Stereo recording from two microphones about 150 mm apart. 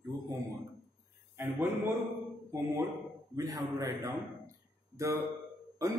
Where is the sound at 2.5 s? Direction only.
20° right (ahead or behind).